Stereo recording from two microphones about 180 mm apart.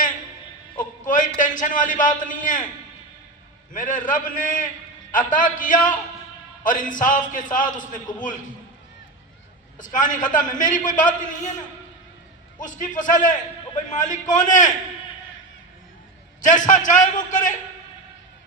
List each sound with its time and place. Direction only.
1.0 s a sound: 45° left (ahead or behind)
1.4 s a man's voice: 45° left (ahead or behind)
3.7 s a man's voice: 45° left (ahead or behind)
9.7 s a man's voice: 45° left (ahead or behind)
16.4 s a man's voice: 45° left (ahead or behind)